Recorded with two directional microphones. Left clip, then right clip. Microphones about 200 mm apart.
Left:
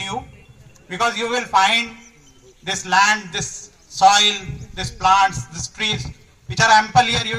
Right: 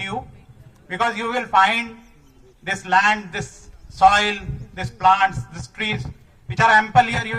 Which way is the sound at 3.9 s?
35° right (ahead or behind).